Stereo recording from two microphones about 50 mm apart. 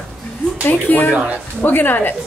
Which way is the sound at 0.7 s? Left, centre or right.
Left.